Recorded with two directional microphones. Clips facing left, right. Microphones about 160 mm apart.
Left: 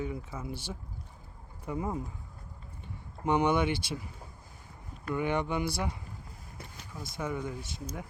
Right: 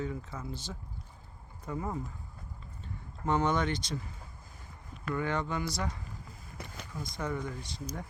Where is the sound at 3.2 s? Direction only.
15° left (ahead or behind).